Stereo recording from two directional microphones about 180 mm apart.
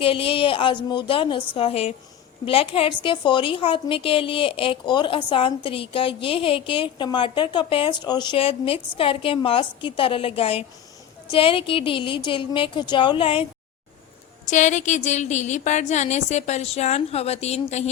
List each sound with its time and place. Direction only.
0.0 s a woman's voice: 30° left (ahead or behind)
14.4 s speech: 40° left (ahead or behind)